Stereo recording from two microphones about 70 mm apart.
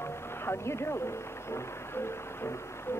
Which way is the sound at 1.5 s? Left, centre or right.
Left.